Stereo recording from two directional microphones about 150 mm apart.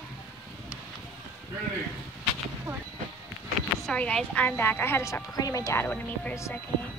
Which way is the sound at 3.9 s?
5° left (ahead or behind).